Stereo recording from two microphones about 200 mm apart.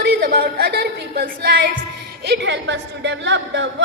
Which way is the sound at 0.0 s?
50° right (ahead or behind).